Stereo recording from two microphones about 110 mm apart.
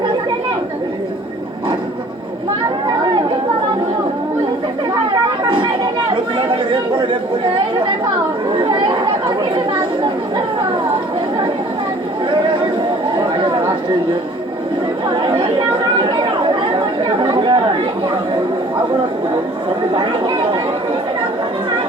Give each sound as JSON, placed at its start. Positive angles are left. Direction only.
{"t": 5.4, "sound": "chatter", "side_deg": -45}
{"t": 13.1, "sound": "chatter", "side_deg": -45}
{"t": 15.1, "sound": "chatter", "side_deg": -45}
{"t": 19.9, "sound": "chatter", "side_deg": -45}